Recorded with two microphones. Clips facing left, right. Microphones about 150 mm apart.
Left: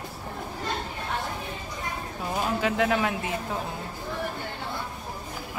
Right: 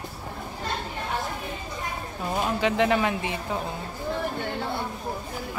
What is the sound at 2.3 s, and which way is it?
Speech, centre (ahead or behind).